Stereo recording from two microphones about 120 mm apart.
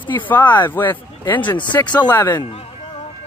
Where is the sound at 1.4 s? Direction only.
40° left (ahead or behind).